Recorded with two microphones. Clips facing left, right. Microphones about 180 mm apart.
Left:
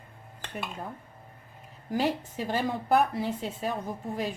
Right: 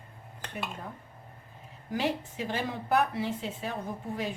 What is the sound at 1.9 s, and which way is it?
Speech, 40° left (ahead or behind).